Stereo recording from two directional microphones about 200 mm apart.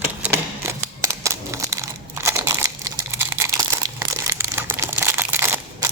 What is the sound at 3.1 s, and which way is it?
Crumpling, 15° right (ahead or behind).